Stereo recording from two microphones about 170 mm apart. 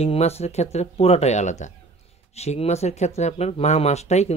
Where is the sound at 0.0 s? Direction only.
35° left (ahead or behind).